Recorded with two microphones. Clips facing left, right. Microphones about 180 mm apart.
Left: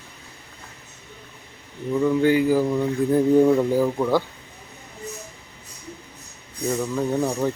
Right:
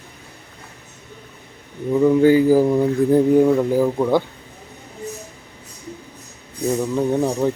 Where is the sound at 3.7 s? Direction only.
15° right (ahead or behind).